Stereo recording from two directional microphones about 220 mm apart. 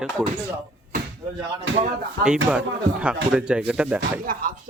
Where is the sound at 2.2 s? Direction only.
5° right (ahead or behind).